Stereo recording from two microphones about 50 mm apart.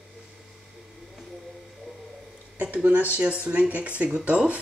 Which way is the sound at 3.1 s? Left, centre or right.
Right.